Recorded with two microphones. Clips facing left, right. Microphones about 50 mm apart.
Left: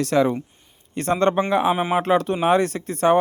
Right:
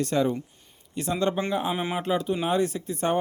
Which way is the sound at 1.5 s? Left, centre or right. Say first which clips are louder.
Left 8 dB; left.